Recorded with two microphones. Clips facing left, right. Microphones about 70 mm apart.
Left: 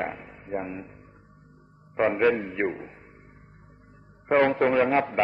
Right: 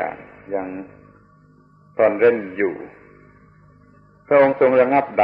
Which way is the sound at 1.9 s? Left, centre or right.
Right.